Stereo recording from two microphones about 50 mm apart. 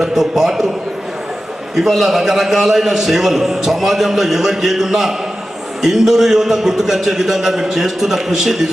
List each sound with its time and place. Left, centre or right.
0.0 s a man's voice: centre
1.7 s a man's voice: centre